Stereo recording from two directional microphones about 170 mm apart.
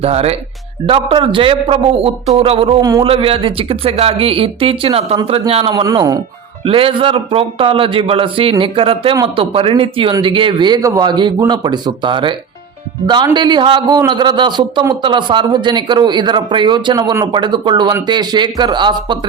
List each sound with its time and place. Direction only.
0.0 s speech: 35° right (ahead or behind)
2.8 s a man's voice: 20° right (ahead or behind)
3.1 s speech: 35° right (ahead or behind)
5.7 s a man's voice: 25° right (ahead or behind)